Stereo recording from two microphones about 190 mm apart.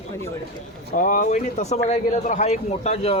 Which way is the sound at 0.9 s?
45° left (ahead or behind).